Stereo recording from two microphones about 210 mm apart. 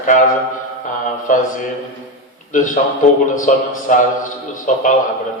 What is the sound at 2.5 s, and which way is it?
Speech, 40° left (ahead or behind).